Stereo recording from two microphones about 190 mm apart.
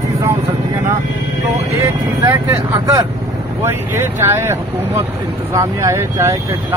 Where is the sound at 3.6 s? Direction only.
10° right (ahead or behind).